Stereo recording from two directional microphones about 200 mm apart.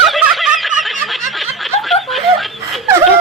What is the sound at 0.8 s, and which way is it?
Snicker, centre (ahead or behind).